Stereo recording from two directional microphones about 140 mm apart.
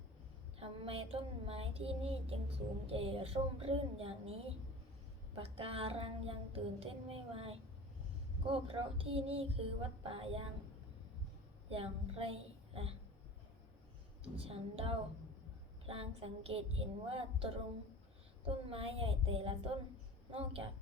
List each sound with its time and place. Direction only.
0.6 s child singing: 40° right (ahead or behind)
2.8 s speech: 40° right (ahead or behind)
5.3 s child singing: 45° right (ahead or behind)
8.4 s speech: 40° right (ahead or behind)
11.7 s a woman's voice: 40° right (ahead or behind)
14.3 s child singing: 45° right (ahead or behind)
18.4 s speech: 40° right (ahead or behind)
20.3 s child singing: 40° right (ahead or behind)